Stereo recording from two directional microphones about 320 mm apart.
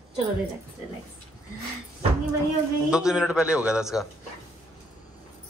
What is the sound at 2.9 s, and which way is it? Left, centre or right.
A man's voice, centre.